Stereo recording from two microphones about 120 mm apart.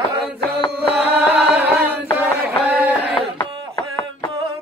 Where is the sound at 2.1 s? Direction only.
15° right (ahead or behind).